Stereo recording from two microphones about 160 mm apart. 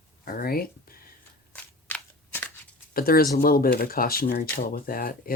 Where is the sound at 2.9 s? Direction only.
70° left (ahead or behind).